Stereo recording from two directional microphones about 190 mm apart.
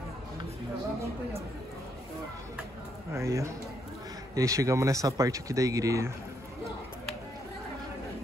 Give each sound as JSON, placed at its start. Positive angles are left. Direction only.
{"t": 3.1, "sound": "speech", "side_deg": -15}